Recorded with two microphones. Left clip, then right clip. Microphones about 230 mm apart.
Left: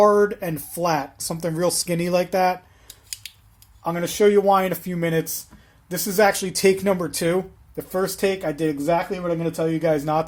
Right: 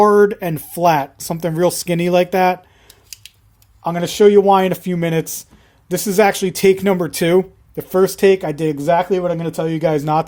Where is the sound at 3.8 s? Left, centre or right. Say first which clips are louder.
Right 6 dB; right.